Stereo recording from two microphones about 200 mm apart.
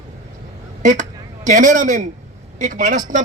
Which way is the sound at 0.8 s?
40° right (ahead or behind).